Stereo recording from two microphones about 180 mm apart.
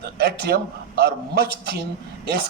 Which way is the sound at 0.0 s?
60° right (ahead or behind).